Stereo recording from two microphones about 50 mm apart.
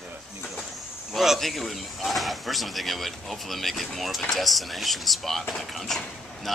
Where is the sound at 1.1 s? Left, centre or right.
Centre.